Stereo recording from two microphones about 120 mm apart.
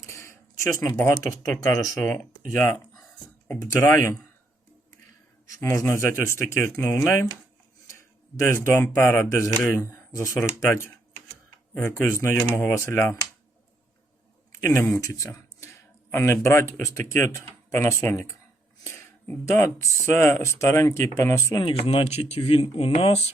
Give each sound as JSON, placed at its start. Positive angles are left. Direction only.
{"t": 0.0, "sound": "a sound", "side_deg": 25}
{"t": 1.0, "sound": "speech", "side_deg": 30}
{"t": 2.0, "sound": "speech", "side_deg": 15}
{"t": 3.8, "sound": "speech", "side_deg": 20}
{"t": 5.7, "sound": "speech", "side_deg": 25}
{"t": 8.4, "sound": "speech", "side_deg": 20}
{"t": 11.7, "sound": "speech", "side_deg": 20}
{"t": 14.5, "sound": "speech", "side_deg": 20}
{"t": 18.9, "sound": "a sound", "side_deg": 15}
{"t": 19.5, "sound": "speech", "side_deg": 20}
{"t": 21.6, "sound": "speech", "side_deg": 55}